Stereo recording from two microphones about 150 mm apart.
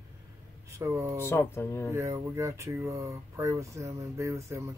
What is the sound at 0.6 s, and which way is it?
Speech, 20° right (ahead or behind).